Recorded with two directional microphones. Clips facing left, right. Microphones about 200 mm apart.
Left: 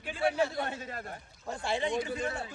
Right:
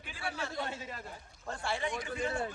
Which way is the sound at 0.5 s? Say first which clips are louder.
Left 3 dB; 55° left (ahead or behind).